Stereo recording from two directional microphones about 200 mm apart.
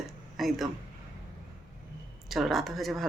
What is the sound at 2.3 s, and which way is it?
Speech, centre (ahead or behind).